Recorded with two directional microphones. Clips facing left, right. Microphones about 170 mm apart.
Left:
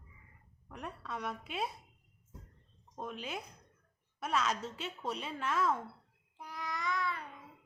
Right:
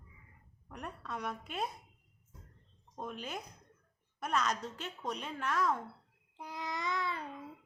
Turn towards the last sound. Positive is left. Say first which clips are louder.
# even
turn(degrees=-30)  # may be behind; listen again after turning